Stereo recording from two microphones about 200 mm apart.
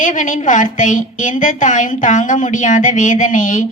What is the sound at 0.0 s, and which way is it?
A woman's voice, 40° left (ahead or behind).